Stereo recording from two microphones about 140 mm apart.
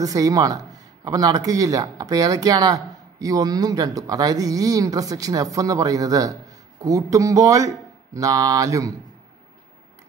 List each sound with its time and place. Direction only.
0.0 s speech: 25° right (ahead or behind)